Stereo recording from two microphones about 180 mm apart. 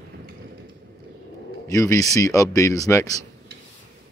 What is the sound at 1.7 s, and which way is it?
Speech, 15° left (ahead or behind).